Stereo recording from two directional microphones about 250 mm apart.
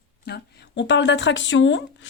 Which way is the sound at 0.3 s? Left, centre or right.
Left.